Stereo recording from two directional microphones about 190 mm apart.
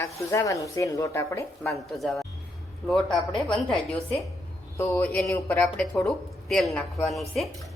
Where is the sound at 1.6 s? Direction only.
Centre (ahead or behind).